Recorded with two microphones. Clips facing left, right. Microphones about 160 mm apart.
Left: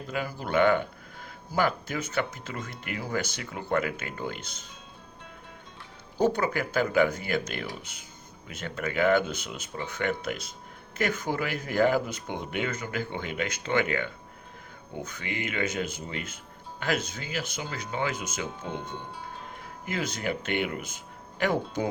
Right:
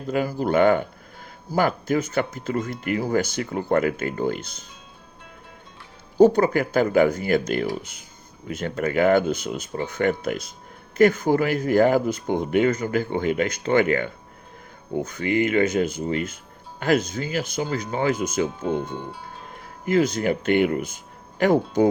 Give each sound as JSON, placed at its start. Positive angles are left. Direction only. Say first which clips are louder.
{"t": 0.1, "sound": "speech", "louder": "right 8 dB", "side_deg": -40}
{"t": 6.1, "sound": "speech", "louder": "right 9 dB", "side_deg": -40}
{"t": 19.8, "sound": "speech", "louder": "right 11 dB", "side_deg": -45}